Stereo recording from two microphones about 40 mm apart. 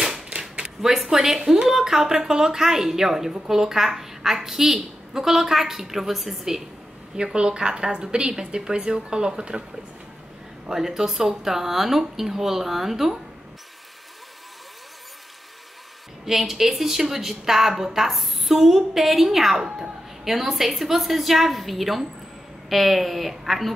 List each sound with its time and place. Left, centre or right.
0.1 s a sound: right
1.0 s a woman's voice: centre
7.3 s a woman's voice: centre
10.7 s a woman's voice: centre
16.3 s a woman's voice: centre